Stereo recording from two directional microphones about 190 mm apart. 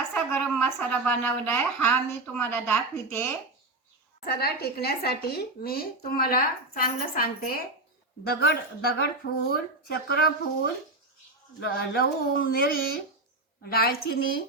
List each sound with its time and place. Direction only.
0.1 s speech: 10° left (ahead or behind)
4.3 s a woman's voice: 55° left (ahead or behind)